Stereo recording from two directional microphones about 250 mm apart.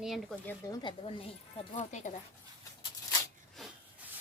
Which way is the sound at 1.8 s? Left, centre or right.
Left.